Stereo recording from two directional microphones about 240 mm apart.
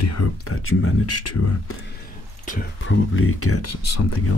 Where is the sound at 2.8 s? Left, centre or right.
Left.